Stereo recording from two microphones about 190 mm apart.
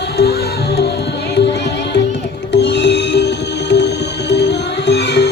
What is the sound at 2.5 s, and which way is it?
Music, 65° left (ahead or behind).